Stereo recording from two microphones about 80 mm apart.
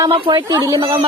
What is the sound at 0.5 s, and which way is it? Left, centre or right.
Speech, right.